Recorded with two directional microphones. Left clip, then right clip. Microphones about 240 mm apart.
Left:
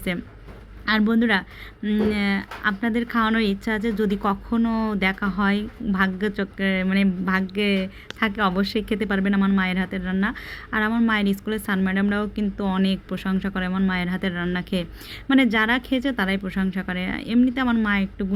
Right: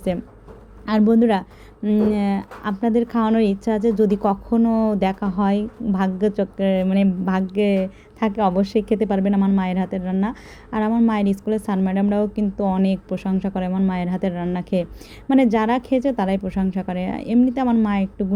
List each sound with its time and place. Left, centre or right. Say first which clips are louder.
1.1 s speech: right 3 dB; centre
4.7 s speech: right 5 dB; centre
4.9 s speech: right 1 dB; centre